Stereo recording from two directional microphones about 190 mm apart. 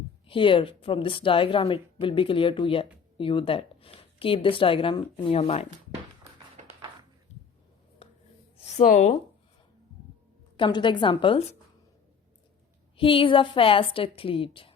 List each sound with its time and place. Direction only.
0.3 s a woman's voice: 25° left (ahead or behind)
8.0 s a sound: 35° left (ahead or behind)
8.6 s speech: 40° left (ahead or behind)
10.6 s a woman's voice: 25° left (ahead or behind)
13.0 s a woman's voice: 25° left (ahead or behind)